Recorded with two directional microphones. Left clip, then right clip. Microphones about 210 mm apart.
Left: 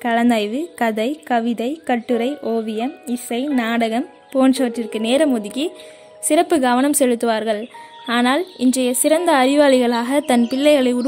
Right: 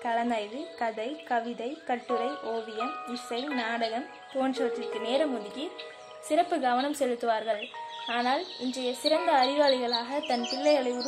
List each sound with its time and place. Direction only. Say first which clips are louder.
0.0 s a woman's voice: left 11 dB; 55° left (ahead or behind)